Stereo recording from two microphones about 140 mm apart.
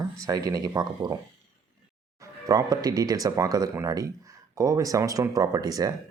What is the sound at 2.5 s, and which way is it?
Speech, 25° right (ahead or behind).